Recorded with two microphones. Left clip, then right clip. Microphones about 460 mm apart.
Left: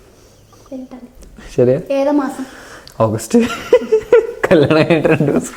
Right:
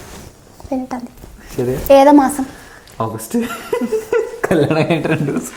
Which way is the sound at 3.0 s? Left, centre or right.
Centre.